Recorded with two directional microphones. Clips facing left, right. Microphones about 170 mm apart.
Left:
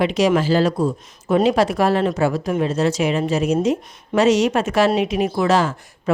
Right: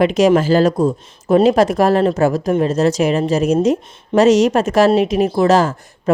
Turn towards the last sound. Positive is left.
turn(degrees=-40)  # may be behind; listen again after turning